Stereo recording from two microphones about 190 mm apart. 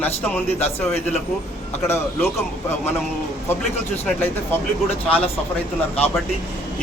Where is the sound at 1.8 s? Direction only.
15° left (ahead or behind).